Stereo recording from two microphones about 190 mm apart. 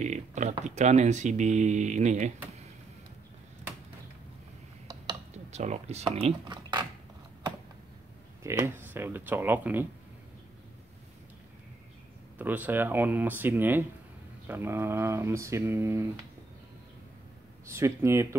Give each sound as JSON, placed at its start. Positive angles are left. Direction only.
{"t": 0.0, "sound": "speech", "side_deg": -40}
{"t": 5.3, "sound": "speech", "side_deg": -35}
{"t": 8.4, "sound": "speech", "side_deg": -15}
{"t": 12.4, "sound": "speech", "side_deg": -10}
{"t": 17.6, "sound": "speech", "side_deg": -15}